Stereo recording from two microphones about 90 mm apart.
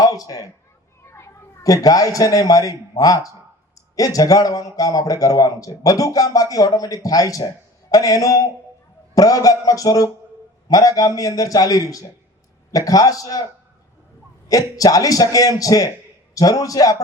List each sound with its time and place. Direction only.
0.0 s a man's voice: 40° left (ahead or behind)
14.4 s a man's voice: 40° left (ahead or behind)